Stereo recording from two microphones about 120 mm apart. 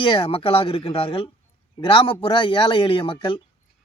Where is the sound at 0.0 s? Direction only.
45° left (ahead or behind).